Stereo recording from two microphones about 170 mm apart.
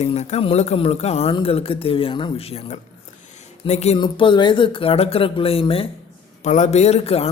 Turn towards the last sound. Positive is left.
turn(degrees=35)  # may be behind; listen again after turning